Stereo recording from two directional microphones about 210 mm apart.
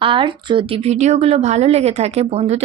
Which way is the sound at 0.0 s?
25° right (ahead or behind).